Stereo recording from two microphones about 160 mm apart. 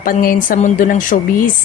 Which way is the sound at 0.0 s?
60° left (ahead or behind).